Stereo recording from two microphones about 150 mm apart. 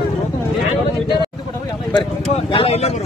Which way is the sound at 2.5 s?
40° left (ahead or behind).